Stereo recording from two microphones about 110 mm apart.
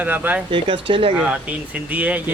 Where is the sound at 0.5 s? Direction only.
50° right (ahead or behind).